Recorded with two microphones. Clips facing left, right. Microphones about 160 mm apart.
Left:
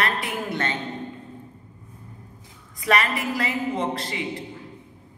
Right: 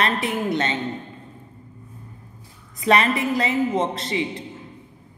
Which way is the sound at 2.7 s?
25° right (ahead or behind).